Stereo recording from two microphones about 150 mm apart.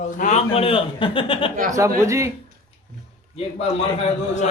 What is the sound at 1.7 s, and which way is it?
Speech, 20° right (ahead or behind).